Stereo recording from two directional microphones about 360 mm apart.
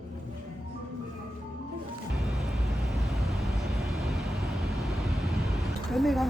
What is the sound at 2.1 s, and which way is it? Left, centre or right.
Vehicle, centre.